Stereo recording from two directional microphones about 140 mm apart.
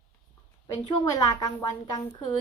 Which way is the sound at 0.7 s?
30° left (ahead or behind).